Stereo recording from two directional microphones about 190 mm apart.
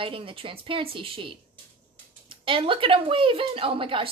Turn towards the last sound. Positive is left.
turn(degrees=-30)  # may be behind; listen again after turning